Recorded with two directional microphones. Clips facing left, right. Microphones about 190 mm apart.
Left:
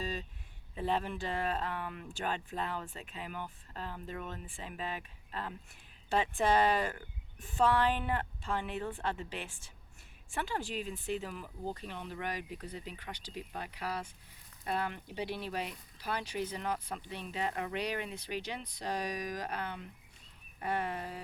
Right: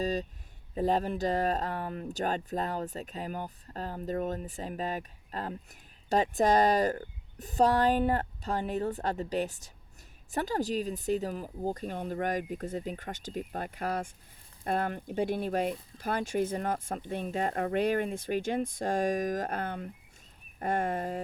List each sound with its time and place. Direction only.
0.0 s speech: 40° right (ahead or behind)